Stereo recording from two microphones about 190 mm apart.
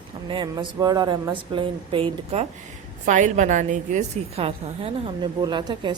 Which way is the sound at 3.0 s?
40° right (ahead or behind).